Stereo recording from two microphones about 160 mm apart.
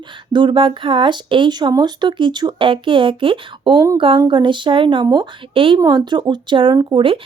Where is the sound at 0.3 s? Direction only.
30° right (ahead or behind).